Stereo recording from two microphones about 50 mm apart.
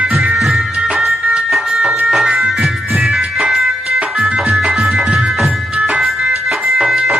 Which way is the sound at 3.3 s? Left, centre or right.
Centre.